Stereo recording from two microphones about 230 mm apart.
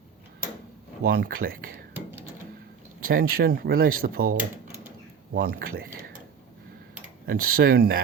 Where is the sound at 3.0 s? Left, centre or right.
Right.